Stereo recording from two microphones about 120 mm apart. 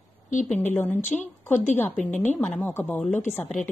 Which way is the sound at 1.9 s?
5° left (ahead or behind).